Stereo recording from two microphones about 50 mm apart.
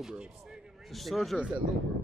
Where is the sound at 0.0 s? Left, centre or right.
Centre.